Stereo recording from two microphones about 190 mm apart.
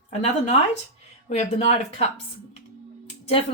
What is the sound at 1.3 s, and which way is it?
Speech, 35° left (ahead or behind).